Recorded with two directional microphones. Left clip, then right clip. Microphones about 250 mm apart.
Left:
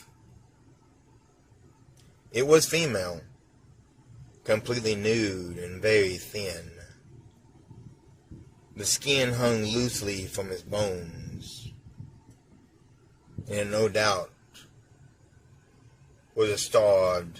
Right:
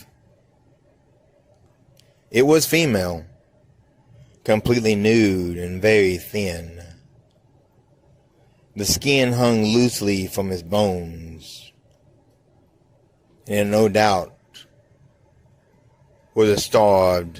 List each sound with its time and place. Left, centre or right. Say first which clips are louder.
2.3 s speech: right 5 dB; right
4.4 s speech: right 8 dB; right
8.8 s speech: right 7 dB; right
13.5 s speech: right 8 dB; right
16.3 s speech: right 7 dB; right